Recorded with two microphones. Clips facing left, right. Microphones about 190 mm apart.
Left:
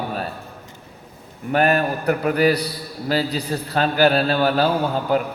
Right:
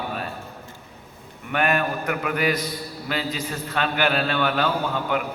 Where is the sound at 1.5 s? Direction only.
35° left (ahead or behind).